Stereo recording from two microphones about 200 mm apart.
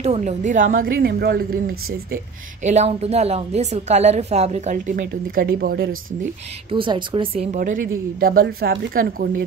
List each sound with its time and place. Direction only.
0.0 s a woman's voice: 35° right (ahead or behind)
2.6 s a woman's voice: 35° right (ahead or behind)
6.7 s speech: 25° right (ahead or behind)
7.5 s a woman's voice: 40° right (ahead or behind)